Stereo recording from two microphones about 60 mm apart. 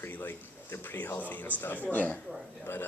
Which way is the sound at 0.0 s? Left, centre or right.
Left.